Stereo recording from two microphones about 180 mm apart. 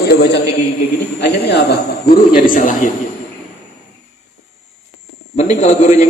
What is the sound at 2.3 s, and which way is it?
Speech, 45° left (ahead or behind).